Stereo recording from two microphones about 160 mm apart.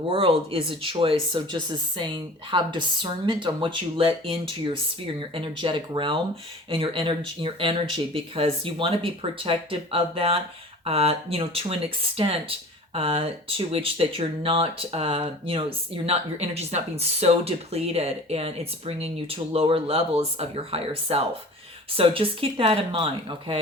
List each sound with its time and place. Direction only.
0.1 s speech: 35° right (ahead or behind)